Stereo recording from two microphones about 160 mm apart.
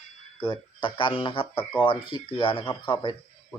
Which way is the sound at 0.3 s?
30° left (ahead or behind).